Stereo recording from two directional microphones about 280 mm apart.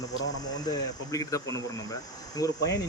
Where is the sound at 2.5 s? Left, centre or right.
Left.